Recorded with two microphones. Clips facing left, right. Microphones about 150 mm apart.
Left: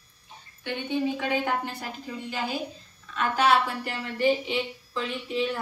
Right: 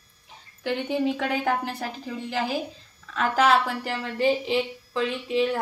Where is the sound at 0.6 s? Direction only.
90° right.